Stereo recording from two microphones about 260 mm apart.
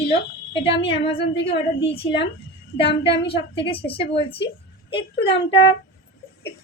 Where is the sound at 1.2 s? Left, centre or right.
Left.